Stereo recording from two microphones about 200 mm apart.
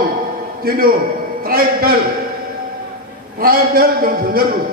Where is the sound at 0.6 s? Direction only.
45° right (ahead or behind).